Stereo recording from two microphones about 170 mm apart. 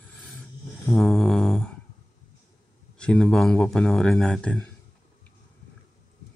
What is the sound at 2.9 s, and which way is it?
Speech, 5° left (ahead or behind).